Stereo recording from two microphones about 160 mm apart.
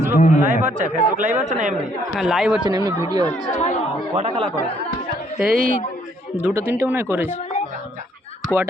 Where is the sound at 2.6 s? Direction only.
20° right (ahead or behind).